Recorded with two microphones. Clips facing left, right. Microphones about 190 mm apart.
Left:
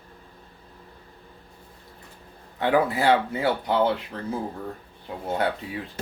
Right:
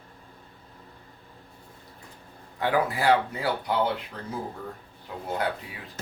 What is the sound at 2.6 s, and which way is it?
Speech, 25° left (ahead or behind).